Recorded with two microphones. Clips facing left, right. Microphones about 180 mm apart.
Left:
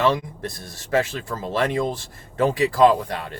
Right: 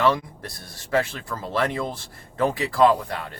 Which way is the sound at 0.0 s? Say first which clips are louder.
Left 1 dB; 20° left (ahead or behind).